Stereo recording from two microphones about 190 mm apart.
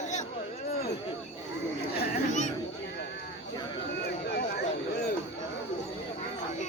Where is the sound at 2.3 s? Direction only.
40° left (ahead or behind).